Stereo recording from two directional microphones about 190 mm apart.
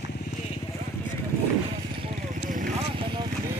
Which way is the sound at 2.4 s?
45° right (ahead or behind).